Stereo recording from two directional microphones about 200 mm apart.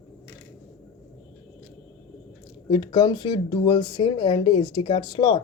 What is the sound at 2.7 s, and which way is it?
Speech, 25° left (ahead or behind).